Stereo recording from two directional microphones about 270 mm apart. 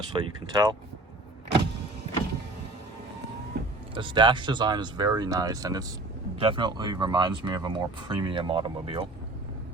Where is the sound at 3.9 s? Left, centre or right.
Centre.